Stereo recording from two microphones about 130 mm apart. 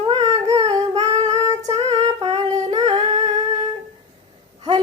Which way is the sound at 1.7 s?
55° right (ahead or behind).